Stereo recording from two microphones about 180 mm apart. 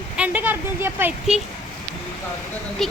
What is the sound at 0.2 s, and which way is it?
Speech, 10° right (ahead or behind).